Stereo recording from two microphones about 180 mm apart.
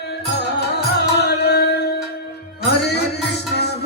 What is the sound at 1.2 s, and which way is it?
Music, 65° left (ahead or behind).